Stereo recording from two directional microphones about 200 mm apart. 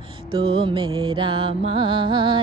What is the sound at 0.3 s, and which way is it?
Music, 25° right (ahead or behind).